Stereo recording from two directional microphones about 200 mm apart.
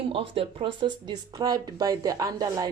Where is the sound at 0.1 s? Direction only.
30° right (ahead or behind).